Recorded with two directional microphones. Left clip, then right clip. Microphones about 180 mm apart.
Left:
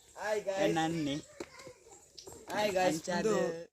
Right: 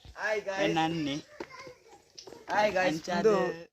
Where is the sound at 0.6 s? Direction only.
5° right (ahead or behind).